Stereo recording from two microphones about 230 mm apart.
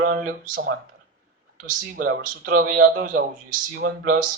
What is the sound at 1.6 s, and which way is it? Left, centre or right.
A man's voice, right.